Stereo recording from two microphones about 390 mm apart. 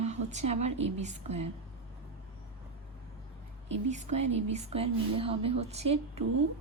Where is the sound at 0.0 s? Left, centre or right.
Centre.